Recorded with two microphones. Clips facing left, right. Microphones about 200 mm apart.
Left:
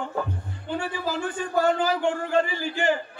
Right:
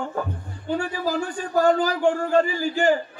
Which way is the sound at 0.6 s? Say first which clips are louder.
Right 4 dB; 40° right (ahead or behind).